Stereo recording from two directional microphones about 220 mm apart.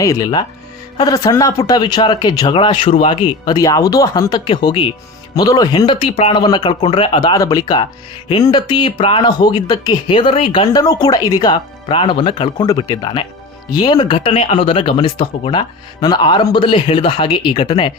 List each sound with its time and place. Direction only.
0.0 s speech: 15° left (ahead or behind)